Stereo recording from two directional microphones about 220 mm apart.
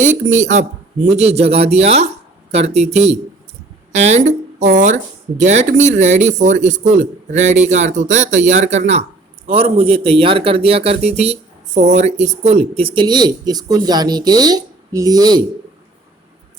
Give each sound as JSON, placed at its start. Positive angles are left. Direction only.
{"t": 0.0, "sound": "a man's voice", "side_deg": -35}